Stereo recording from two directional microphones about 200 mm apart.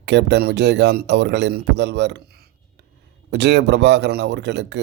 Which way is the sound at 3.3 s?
60° right (ahead or behind).